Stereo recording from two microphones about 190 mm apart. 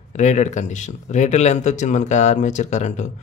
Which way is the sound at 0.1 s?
40° left (ahead or behind).